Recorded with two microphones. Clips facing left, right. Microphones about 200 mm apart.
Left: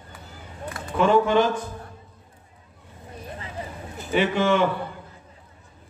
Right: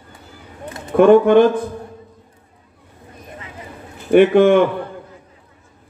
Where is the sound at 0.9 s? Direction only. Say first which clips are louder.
Right 9 dB; 55° right (ahead or behind).